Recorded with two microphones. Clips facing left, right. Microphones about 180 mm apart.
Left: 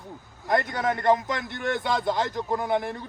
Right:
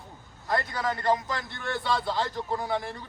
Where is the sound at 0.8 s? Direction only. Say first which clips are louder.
Left 4 dB; 55° left (ahead or behind).